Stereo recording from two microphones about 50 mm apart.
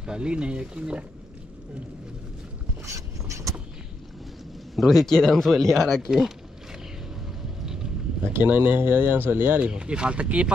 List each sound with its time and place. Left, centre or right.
0.0 s speech: centre
2.9 s boat: right
4.7 s speech: centre
6.0 s speech: centre
7.6 s a sound: centre
8.3 s speech: right
9.6 s speech: right